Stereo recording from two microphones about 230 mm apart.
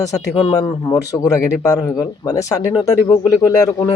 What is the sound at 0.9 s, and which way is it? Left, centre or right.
Speech, centre.